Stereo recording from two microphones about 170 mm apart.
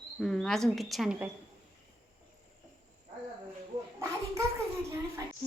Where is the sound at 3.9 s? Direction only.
15° right (ahead or behind).